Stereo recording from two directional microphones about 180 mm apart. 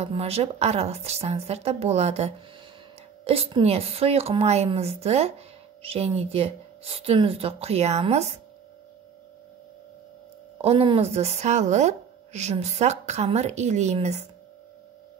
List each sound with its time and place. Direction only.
0.0 s speech: 35° right (ahead or behind)
10.6 s speech: 30° right (ahead or behind)